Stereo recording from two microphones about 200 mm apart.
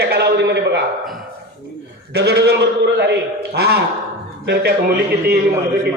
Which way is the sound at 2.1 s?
55° right (ahead or behind).